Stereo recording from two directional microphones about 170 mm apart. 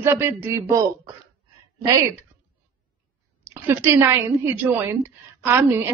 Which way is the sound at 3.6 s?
15° right (ahead or behind).